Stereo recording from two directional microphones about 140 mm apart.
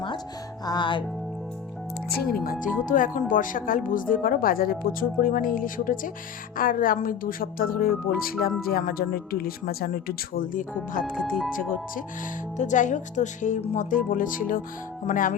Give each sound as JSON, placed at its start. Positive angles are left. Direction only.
{"t": 0.6, "sound": "music", "side_deg": 30}
{"t": 2.3, "sound": "speech", "side_deg": 90}
{"t": 11.0, "sound": "speech", "side_deg": -5}
{"t": 12.5, "sound": "speech", "side_deg": 60}